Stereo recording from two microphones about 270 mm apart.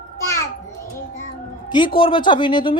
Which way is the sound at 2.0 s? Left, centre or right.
Centre.